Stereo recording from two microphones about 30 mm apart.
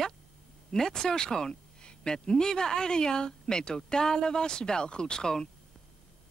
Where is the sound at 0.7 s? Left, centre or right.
Centre.